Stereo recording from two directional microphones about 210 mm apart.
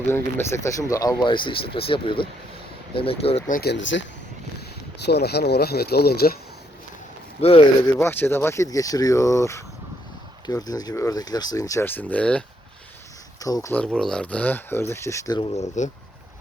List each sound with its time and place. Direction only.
0.1 s speech: 10° left (ahead or behind); by 3.4 s 25° left (ahead or behind)
3.5 s speech: 50° left (ahead or behind)
5.0 s speech: 50° left (ahead or behind)
7.9 s speech: 10° left (ahead or behind)
15.8 s speech: 35° left (ahead or behind)